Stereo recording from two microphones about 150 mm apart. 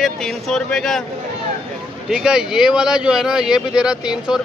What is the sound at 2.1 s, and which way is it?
Speech, 5° right (ahead or behind).